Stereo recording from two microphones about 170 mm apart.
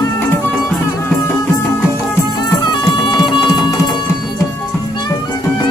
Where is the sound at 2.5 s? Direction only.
25° left (ahead or behind).